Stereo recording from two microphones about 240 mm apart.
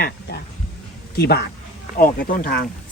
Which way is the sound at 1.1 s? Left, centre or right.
Left.